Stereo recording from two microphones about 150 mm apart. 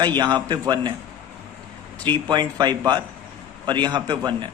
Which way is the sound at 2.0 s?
30° right (ahead or behind).